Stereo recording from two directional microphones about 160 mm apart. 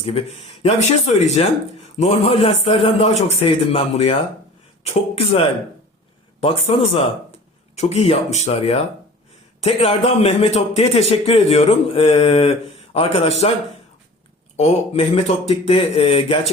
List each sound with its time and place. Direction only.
0.0 s a man's voice: 40° left (ahead or behind)
6.7 s a man's voice: 35° left (ahead or behind)
14.5 s a man's voice: 40° left (ahead or behind)